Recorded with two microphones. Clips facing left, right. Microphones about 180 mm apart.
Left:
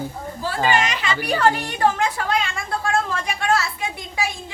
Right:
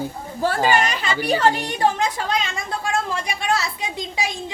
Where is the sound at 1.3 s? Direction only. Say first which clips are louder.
Right 1 dB; 20° right (ahead or behind).